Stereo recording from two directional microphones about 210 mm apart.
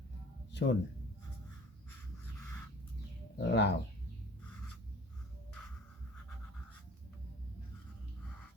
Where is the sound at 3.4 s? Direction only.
55° left (ahead or behind).